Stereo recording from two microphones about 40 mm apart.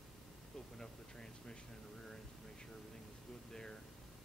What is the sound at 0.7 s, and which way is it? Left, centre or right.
Speech, centre.